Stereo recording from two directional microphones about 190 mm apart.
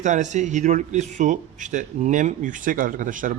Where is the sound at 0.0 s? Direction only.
40° right (ahead or behind).